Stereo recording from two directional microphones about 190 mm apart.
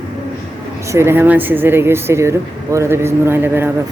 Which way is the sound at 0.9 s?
15° right (ahead or behind).